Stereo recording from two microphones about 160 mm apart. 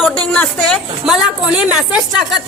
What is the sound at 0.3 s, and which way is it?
A woman's voice, 5° left (ahead or behind).